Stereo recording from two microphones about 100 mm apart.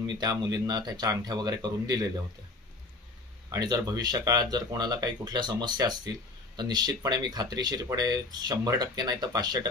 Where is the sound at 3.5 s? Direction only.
40° right (ahead or behind).